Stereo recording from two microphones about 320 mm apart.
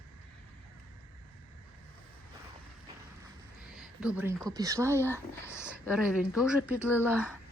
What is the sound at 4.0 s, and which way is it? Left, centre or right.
A woman's voice, centre.